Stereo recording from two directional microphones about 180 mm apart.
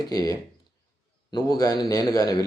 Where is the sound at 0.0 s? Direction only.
20° left (ahead or behind).